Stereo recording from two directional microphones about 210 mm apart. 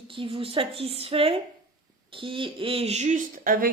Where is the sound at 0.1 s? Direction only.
25° right (ahead or behind).